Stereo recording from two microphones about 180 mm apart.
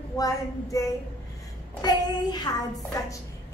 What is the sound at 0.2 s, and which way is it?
Child singing, 20° left (ahead or behind).